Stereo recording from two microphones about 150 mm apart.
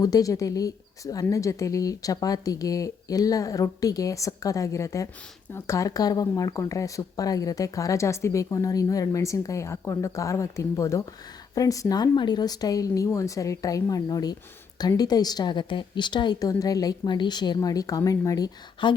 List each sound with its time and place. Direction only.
0.0 s speech: 25° left (ahead or behind)